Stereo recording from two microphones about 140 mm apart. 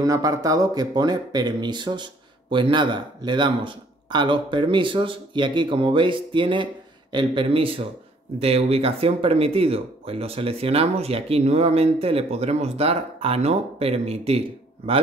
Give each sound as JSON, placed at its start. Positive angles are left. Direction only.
{"t": 0.0, "sound": "speech", "side_deg": -25}